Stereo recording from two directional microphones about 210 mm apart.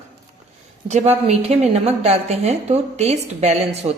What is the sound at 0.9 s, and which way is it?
A woman's voice, 35° right (ahead or behind).